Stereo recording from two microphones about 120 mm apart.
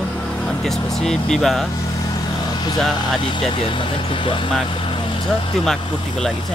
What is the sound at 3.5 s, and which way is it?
Speech, 45° left (ahead or behind).